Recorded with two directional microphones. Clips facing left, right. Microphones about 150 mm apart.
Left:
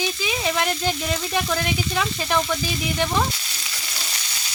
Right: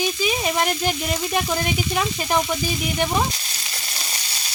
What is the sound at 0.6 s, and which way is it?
Speech, 15° right (ahead or behind).